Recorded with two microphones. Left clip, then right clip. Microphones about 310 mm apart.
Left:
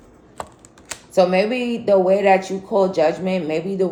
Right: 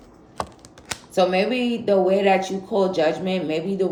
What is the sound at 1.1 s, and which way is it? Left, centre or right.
Speech, centre.